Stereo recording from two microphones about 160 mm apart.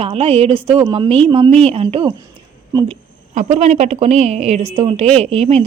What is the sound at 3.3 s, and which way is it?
Speech, 45° right (ahead or behind).